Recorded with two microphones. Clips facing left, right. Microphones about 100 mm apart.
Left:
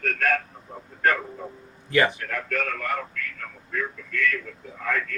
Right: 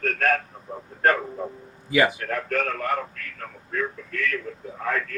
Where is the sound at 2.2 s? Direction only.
40° right (ahead or behind).